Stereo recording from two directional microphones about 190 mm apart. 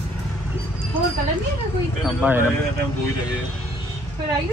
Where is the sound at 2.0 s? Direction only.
5° right (ahead or behind).